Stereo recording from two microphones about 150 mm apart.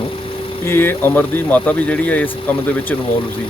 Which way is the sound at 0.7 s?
15° left (ahead or behind).